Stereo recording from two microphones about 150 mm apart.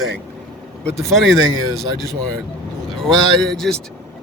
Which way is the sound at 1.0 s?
Centre (ahead or behind).